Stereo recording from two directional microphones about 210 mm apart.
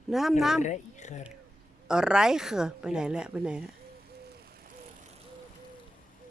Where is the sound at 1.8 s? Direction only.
5° right (ahead or behind).